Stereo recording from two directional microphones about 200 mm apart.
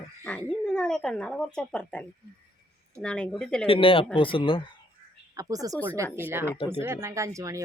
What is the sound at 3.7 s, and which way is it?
Speech, 25° left (ahead or behind).